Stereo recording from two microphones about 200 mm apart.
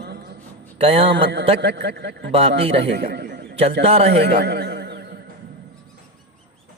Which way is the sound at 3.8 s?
30° right (ahead or behind).